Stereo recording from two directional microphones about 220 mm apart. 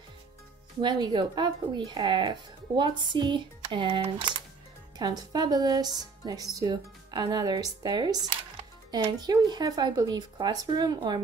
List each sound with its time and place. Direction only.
0.7 s speech: 20° right (ahead or behind)